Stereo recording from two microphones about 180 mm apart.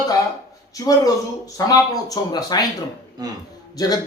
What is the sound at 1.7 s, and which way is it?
Speech, 20° left (ahead or behind).